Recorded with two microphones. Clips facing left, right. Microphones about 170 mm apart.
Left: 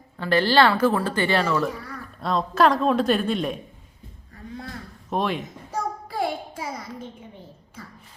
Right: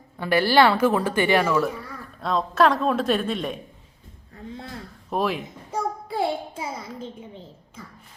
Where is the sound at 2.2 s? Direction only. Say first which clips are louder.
Even; centre (ahead or behind).